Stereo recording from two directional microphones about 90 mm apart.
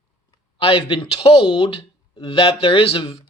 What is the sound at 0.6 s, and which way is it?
Speech, 90° left.